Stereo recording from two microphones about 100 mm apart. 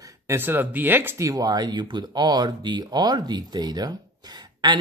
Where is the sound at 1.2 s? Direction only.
40° right (ahead or behind).